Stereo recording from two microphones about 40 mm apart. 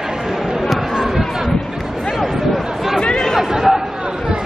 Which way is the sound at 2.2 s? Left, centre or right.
Centre.